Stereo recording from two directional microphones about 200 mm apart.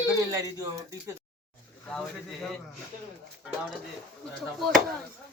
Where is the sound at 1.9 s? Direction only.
5° left (ahead or behind).